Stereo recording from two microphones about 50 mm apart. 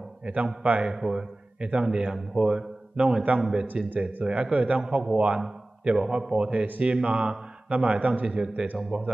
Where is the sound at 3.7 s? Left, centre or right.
Right.